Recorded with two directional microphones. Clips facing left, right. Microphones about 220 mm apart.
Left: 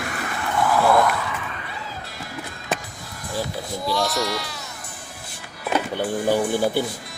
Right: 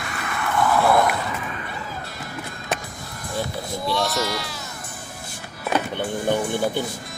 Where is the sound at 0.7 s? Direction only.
Centre (ahead or behind).